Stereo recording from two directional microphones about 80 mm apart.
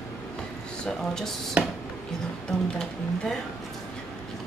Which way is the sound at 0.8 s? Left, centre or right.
Centre.